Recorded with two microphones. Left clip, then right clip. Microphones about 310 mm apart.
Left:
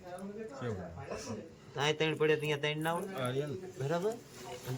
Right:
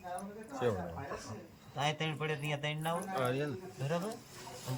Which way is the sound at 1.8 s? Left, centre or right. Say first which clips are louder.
Left 5 dB; centre.